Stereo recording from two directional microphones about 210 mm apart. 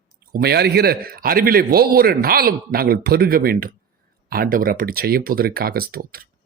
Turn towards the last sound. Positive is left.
turn(degrees=-45)  # may be behind; listen again after turning